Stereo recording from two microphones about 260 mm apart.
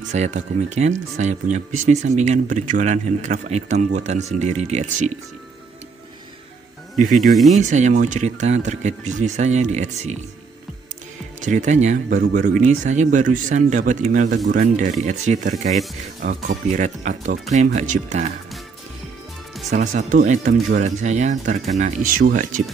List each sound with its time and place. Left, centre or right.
0.1 s speech: right
7.5 s speech: right
11.4 s speech: right
19.7 s speech: right